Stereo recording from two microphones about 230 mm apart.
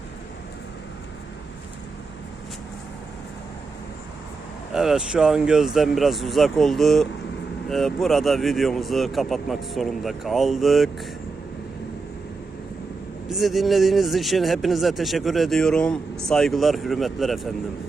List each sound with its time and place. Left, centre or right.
4.7 s speech: centre
13.2 s speech: centre